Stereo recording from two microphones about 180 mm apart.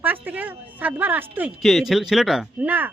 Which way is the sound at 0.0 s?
10° right (ahead or behind).